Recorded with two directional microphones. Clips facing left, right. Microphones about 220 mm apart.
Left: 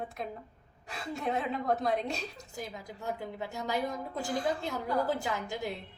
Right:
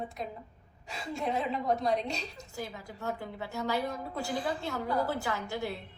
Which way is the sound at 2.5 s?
20° left (ahead or behind).